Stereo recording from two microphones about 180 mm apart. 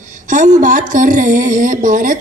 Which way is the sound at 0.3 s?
45° right (ahead or behind).